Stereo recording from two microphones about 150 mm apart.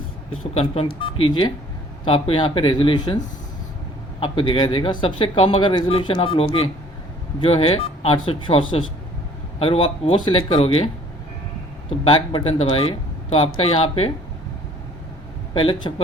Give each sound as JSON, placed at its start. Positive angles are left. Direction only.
{"t": 0.5, "sound": "speech", "side_deg": 40}
{"t": 4.2, "sound": "speech", "side_deg": 35}
{"t": 12.0, "sound": "speech", "side_deg": 35}
{"t": 15.5, "sound": "speech", "side_deg": 35}